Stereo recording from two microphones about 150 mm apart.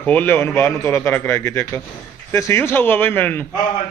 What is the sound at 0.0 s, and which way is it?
A man's voice, 10° left (ahead or behind).